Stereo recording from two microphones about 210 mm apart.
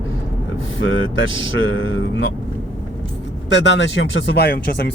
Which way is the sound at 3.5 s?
55° left (ahead or behind).